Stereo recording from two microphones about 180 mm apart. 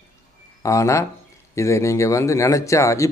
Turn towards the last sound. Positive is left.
turn(degrees=15)  # may be behind; listen again after turning